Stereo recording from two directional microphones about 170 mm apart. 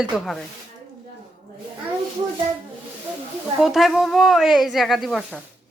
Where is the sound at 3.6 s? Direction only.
Centre (ahead or behind).